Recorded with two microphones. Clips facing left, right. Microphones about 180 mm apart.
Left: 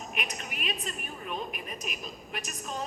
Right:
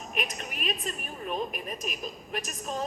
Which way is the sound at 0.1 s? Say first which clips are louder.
Right 6 dB; 40° right (ahead or behind).